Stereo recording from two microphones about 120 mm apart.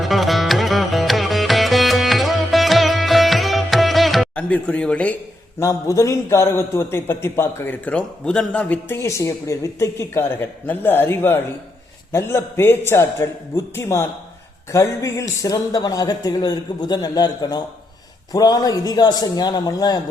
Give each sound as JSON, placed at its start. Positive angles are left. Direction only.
{"t": 0.0, "sound": "music", "side_deg": 0}
{"t": 4.4, "sound": "speech", "side_deg": 10}
{"t": 5.5, "sound": "a man's voice", "side_deg": 25}
{"t": 9.0, "sound": "a man's voice", "side_deg": 25}